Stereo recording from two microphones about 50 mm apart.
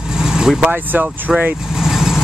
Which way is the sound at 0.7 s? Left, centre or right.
Right.